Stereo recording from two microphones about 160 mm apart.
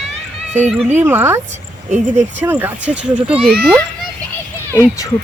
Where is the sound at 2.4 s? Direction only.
10° right (ahead or behind).